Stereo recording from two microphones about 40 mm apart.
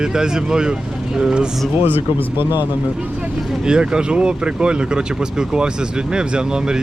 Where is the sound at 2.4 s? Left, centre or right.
Right.